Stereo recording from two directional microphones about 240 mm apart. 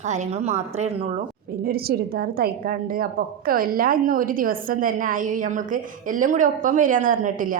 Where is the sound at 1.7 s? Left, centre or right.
Right.